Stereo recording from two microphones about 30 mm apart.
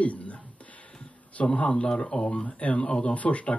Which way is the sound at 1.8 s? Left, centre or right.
Left.